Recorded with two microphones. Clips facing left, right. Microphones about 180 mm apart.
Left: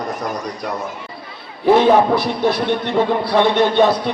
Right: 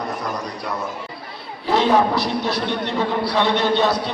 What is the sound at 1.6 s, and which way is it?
A man's voice, 55° left (ahead or behind).